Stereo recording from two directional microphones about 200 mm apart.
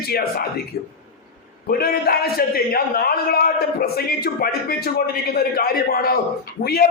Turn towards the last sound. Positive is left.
turn(degrees=50)  # may be behind; listen again after turning